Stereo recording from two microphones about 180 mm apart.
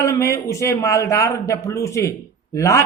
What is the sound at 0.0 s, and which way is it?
A man's voice, 15° left (ahead or behind).